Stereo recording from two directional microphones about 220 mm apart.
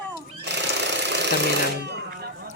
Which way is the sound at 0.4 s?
50° right (ahead or behind).